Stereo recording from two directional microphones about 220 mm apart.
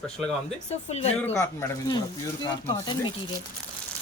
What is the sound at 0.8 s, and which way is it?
Speech, 30° left (ahead or behind).